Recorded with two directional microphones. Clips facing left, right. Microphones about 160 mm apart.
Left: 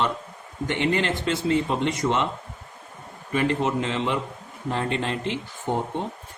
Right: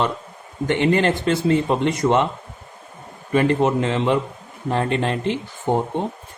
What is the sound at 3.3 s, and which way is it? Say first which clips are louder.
A man's voice: right 6 dB; 55° right (ahead or behind).